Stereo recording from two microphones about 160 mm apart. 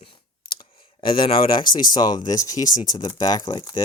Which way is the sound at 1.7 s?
25° left (ahead or behind).